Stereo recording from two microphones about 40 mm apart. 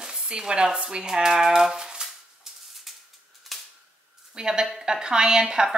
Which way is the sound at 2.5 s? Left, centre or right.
Centre.